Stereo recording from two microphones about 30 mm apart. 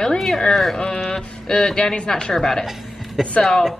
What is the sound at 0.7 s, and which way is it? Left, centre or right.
A woman's voice, left.